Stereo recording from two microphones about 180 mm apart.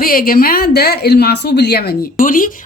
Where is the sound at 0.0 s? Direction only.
55° left (ahead or behind).